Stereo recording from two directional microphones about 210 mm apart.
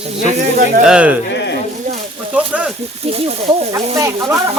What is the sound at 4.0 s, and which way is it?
Speech, 15° right (ahead or behind).